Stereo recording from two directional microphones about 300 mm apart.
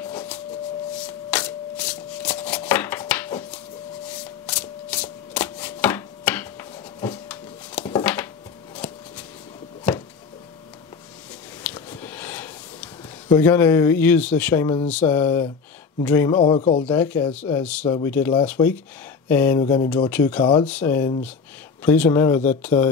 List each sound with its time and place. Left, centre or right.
0.0 s a sound: centre
0.9 s shuffling cards: centre
4.1 s rub: centre
7.0 s a sound: centre
11.6 s a sound: centre
14.9 s speech: centre; by 16.8 s left
16.8 s speech: centre
19.6 s speech: left
20.1 s speech: centre